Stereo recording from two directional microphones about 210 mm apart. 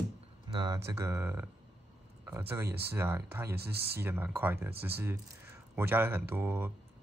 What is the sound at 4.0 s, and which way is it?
Speech, 10° right (ahead or behind).